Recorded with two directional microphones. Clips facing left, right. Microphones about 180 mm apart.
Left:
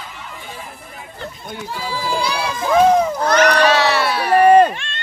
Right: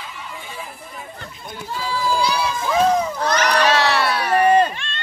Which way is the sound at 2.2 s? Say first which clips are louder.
Even; 55° left (ahead or behind).